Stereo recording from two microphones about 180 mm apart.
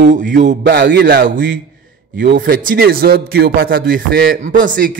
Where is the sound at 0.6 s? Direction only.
75° right (ahead or behind).